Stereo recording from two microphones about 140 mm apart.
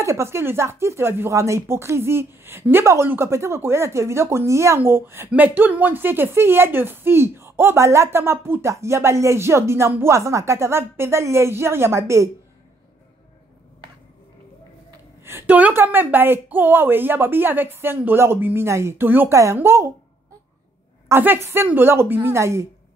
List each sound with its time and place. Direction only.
0.0 s speech: 20° right (ahead or behind)
15.2 s a woman's voice: 15° right (ahead or behind)
21.1 s a woman's voice: 15° right (ahead or behind)